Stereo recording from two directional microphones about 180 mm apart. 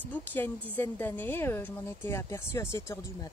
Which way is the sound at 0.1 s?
10° left (ahead or behind).